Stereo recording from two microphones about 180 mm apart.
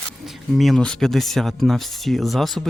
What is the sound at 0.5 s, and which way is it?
Speech, centre (ahead or behind).